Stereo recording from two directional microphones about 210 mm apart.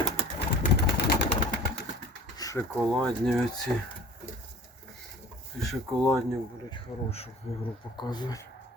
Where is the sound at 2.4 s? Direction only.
15° left (ahead or behind).